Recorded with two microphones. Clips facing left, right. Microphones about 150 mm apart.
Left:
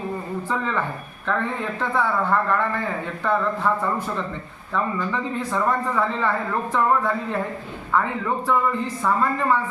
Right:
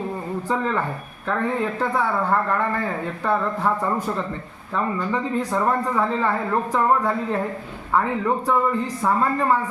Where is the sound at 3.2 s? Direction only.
10° right (ahead or behind).